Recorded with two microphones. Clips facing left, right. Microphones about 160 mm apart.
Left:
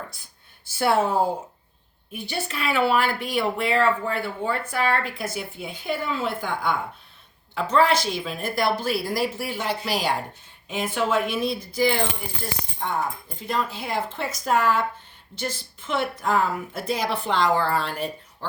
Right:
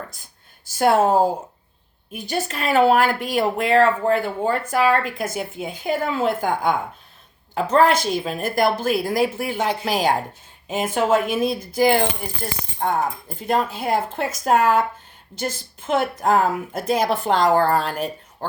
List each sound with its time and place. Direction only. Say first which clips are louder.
0.6 s speech: right 5 dB; 45° right (ahead or behind)